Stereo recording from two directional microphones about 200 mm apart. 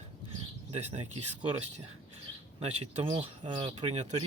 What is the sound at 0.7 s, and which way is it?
Speech, 35° right (ahead or behind).